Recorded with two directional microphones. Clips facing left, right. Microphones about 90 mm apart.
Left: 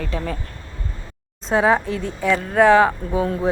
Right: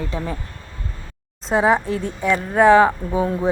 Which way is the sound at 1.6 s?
20° right (ahead or behind).